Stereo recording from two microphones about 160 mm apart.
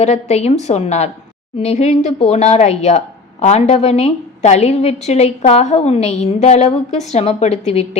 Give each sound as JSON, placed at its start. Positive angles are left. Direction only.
{"t": 0.0, "sound": "a woman's voice", "side_deg": 45}